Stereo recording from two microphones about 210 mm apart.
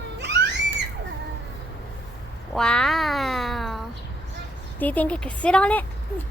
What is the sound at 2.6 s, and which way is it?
Cat, 5° left (ahead or behind).